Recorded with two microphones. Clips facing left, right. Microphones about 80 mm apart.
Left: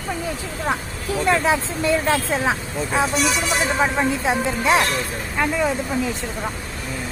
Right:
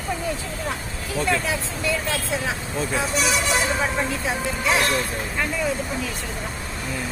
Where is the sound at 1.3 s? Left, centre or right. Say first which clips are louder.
Left 8 dB; left.